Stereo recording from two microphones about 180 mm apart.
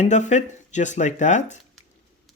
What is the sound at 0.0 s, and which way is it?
Speech, 40° left (ahead or behind).